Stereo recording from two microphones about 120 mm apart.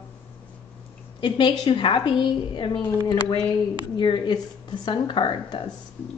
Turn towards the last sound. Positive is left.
turn(degrees=40)  # may be behind; listen again after turning